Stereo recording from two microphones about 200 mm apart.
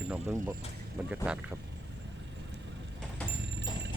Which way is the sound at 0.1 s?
10° right (ahead or behind).